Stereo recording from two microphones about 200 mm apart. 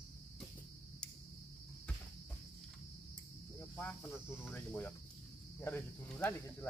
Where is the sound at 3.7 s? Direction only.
10° left (ahead or behind).